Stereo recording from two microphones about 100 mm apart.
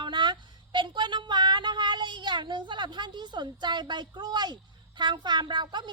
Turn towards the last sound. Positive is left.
turn(degrees=-50)  # may be behind; listen again after turning